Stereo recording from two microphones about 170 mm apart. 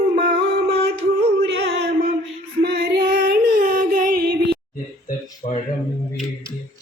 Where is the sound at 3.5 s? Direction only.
50° right (ahead or behind).